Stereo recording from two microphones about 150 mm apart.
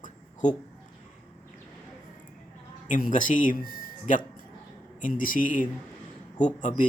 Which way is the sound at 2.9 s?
60° left (ahead or behind).